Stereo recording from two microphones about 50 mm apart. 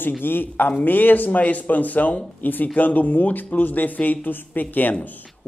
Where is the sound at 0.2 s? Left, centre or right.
Left.